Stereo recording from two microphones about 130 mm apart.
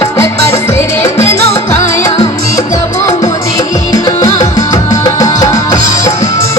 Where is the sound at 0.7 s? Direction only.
20° left (ahead or behind).